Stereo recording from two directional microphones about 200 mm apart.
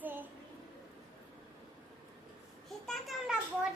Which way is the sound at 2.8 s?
Centre (ahead or behind).